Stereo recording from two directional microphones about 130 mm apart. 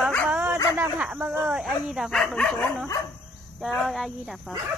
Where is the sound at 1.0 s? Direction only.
10° right (ahead or behind); by 2.5 s 5° left (ahead or behind).